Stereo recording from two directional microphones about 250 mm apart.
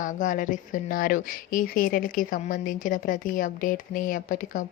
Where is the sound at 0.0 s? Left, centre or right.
Left.